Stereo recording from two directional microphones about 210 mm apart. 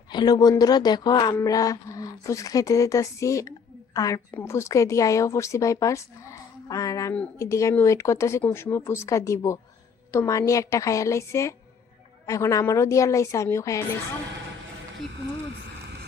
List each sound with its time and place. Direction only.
0.1 s a woman's voice: 20° left (ahead or behind)